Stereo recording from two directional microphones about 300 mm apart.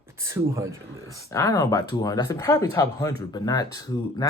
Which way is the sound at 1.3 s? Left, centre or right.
Centre.